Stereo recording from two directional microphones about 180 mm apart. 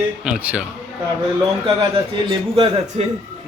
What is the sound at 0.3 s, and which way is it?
Speech, 5° right (ahead or behind).